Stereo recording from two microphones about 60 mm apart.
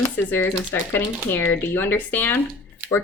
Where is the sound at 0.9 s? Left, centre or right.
Left.